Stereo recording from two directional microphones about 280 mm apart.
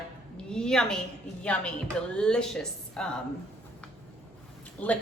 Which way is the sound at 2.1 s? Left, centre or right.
Centre.